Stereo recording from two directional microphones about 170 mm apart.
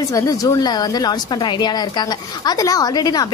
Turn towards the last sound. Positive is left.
turn(degrees=25)  # may be behind; listen again after turning